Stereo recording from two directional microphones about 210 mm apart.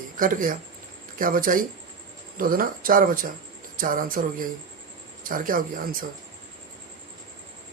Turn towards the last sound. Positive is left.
turn(degrees=-40)  # may be behind; listen again after turning